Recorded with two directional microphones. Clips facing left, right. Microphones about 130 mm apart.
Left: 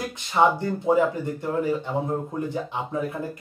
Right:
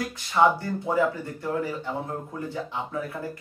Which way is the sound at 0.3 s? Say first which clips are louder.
Left 1 dB; 20° left (ahead or behind).